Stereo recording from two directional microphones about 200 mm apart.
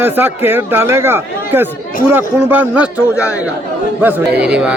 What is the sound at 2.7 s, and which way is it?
Speech, 5° right (ahead or behind).